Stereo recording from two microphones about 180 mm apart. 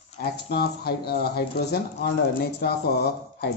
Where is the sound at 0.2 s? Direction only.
60° left (ahead or behind).